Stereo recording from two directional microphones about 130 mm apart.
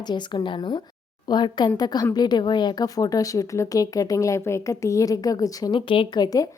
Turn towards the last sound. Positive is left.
turn(degrees=30)  # may be behind; listen again after turning